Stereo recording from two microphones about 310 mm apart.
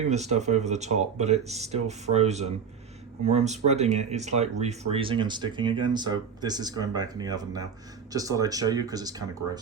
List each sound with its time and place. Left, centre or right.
0.0 s speech: right